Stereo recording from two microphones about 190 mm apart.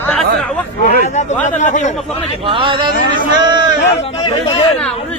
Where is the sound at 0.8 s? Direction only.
40° left (ahead or behind).